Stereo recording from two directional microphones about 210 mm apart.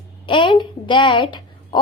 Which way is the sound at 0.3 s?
25° left (ahead or behind).